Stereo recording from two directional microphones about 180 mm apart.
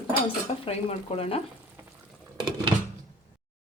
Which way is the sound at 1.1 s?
35° left (ahead or behind).